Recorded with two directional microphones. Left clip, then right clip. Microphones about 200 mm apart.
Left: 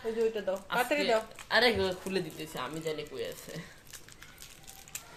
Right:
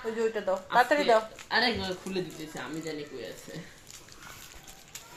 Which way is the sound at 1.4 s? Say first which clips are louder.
Left 1 dB; 45° left (ahead or behind).